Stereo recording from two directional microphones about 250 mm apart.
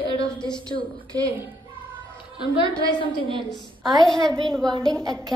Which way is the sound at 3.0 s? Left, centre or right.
Centre.